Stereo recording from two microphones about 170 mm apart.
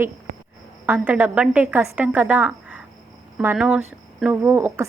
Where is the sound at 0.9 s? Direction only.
10° right (ahead or behind).